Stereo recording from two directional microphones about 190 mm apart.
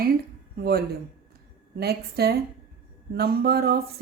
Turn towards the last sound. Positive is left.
turn(degrees=-55)  # may be behind; listen again after turning